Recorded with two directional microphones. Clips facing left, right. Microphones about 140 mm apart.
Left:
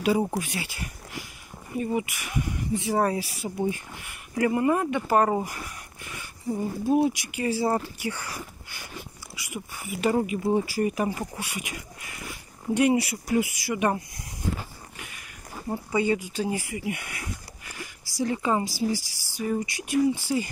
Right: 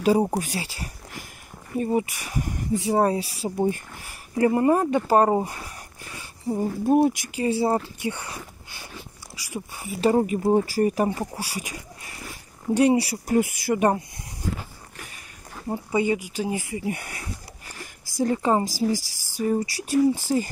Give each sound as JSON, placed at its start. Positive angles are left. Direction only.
{"t": 0.0, "sound": "speech", "side_deg": -35}
{"t": 2.8, "sound": "speech", "side_deg": -30}
{"t": 3.5, "sound": "speech", "side_deg": -45}
{"t": 6.9, "sound": "speech", "side_deg": -50}
{"t": 7.2, "sound": "speech", "side_deg": -30}
{"t": 13.4, "sound": "speech", "side_deg": -50}
{"t": 15.0, "sound": "dog", "side_deg": -35}
{"t": 15.7, "sound": "speech", "side_deg": -20}
{"t": 16.8, "sound": "a sound", "side_deg": -35}
{"t": 18.0, "sound": "speech", "side_deg": -45}